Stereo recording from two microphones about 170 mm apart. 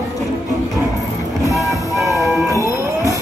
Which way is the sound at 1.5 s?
Centre (ahead or behind).